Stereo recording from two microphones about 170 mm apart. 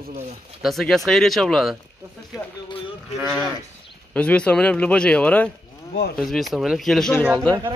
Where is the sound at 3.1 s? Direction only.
5° left (ahead or behind).